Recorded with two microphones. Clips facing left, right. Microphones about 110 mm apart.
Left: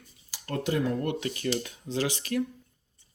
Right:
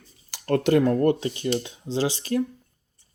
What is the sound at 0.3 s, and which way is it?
Speech, 65° right (ahead or behind).